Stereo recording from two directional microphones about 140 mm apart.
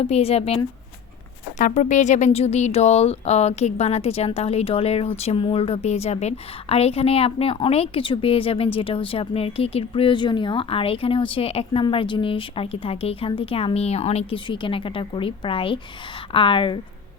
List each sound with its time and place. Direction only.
0.0 s speech: 45° left (ahead or behind)
1.5 s speech: 60° left (ahead or behind); by 16.8 s 35° left (ahead or behind)